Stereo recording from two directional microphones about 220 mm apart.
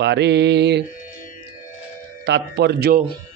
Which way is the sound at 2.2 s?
50° right (ahead or behind).